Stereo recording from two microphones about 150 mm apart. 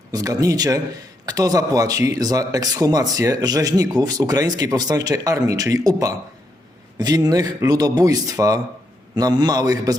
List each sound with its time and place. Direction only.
0.1 s a man's voice: 25° right (ahead or behind)